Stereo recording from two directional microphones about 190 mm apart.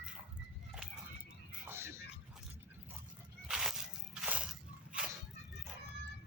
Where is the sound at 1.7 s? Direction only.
15° right (ahead or behind).